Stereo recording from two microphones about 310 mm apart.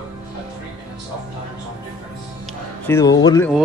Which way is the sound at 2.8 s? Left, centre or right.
Centre.